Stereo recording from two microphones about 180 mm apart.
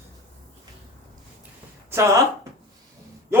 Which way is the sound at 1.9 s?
15° right (ahead or behind).